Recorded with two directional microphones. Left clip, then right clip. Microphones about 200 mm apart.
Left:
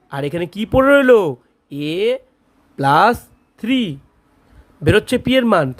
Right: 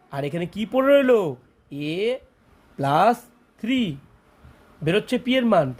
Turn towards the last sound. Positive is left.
turn(degrees=30)  # may be behind; listen again after turning